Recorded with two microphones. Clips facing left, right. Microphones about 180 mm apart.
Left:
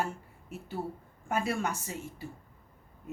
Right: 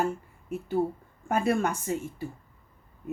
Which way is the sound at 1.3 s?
55° right (ahead or behind).